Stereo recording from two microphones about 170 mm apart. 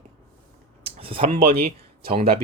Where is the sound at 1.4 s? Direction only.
65° right (ahead or behind).